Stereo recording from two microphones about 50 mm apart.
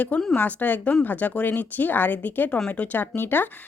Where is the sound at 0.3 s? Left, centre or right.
Left.